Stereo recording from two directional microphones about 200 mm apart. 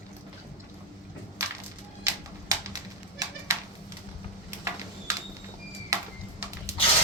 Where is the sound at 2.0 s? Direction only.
15° right (ahead or behind).